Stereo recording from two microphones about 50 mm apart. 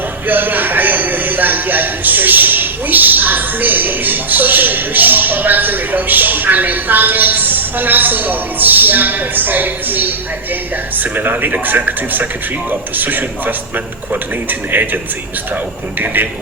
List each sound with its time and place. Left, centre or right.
0.3 s a man's voice: right